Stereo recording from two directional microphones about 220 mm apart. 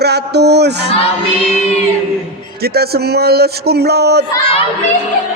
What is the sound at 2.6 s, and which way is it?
Speech, 45° right (ahead or behind).